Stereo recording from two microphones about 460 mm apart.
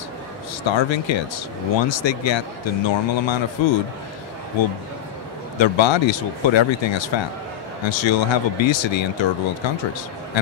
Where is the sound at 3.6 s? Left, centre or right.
Left.